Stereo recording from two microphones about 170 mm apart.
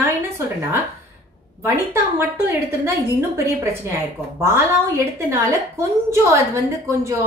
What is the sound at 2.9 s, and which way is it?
A woman's voice, 15° right (ahead or behind).